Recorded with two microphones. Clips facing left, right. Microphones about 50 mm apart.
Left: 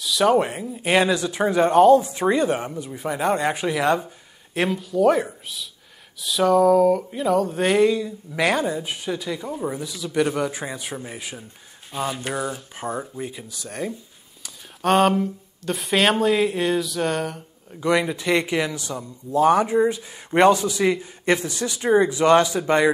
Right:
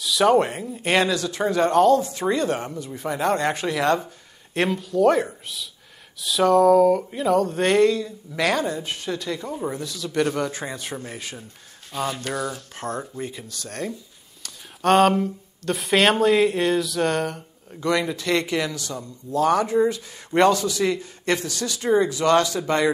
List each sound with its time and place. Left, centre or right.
0.0 s speech: centre
1.0 s a sound: centre
4.6 s speech: centre
6.2 s a sound: centre
14.4 s speech: centre
17.8 s speech: centre